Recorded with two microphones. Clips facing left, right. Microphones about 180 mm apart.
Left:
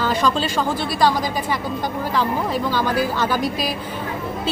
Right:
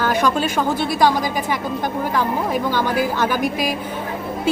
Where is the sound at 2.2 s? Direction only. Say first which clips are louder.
Even; 15° right (ahead or behind).